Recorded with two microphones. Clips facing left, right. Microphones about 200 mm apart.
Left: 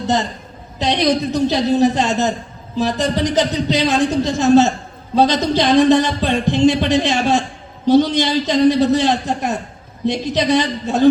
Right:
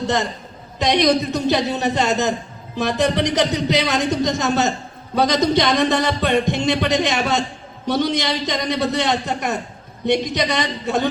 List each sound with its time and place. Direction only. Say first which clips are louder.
0.8 s speech: even; 65° right (ahead or behind)